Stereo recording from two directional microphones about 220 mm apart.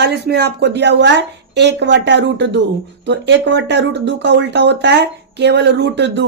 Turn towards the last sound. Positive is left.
turn(degrees=-55)  # may be behind; listen again after turning